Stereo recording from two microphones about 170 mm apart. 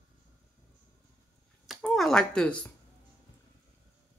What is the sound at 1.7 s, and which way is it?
Speech, centre (ahead or behind).